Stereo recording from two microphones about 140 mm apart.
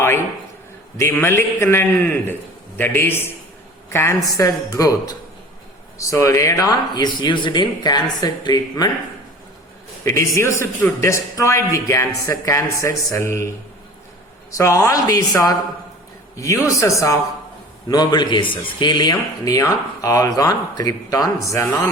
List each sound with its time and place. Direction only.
0.9 s a man's voice: 15° left (ahead or behind)
10.0 s a man's voice: 20° left (ahead or behind)
14.5 s a man's voice: 25° left (ahead or behind)